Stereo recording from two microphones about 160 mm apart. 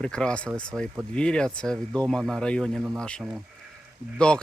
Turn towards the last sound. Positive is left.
turn(degrees=5)  # may be behind; listen again after turning